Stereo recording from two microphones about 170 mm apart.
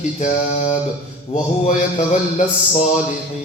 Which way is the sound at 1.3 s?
45° left (ahead or behind).